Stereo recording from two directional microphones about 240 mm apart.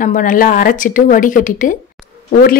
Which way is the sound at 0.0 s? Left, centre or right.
Left.